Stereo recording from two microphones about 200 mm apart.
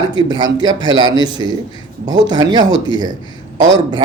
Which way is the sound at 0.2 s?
20° right (ahead or behind).